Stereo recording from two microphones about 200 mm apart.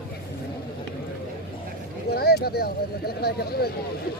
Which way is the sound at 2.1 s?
55° left (ahead or behind).